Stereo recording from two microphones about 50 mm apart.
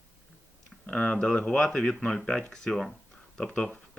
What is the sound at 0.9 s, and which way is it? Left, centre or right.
Speech, left.